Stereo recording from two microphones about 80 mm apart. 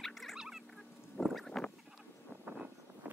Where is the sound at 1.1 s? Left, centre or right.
Centre.